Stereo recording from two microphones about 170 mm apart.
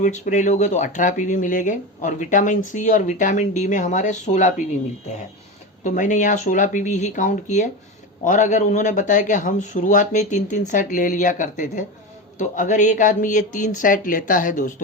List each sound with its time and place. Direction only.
0.0 s speech: 45° left (ahead or behind)
5.8 s speech: 45° left (ahead or behind)